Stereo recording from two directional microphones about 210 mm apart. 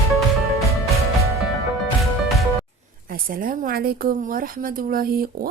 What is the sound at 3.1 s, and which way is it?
A woman's voice, 40° right (ahead or behind).